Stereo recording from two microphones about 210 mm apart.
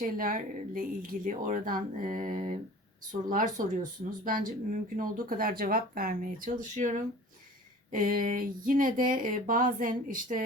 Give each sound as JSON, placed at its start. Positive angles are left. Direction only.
{"t": 0.0, "sound": "speech", "side_deg": -40}